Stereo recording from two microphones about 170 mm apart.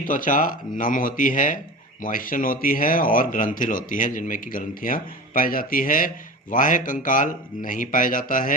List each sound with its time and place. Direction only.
0.1 s speech: 50° left (ahead or behind)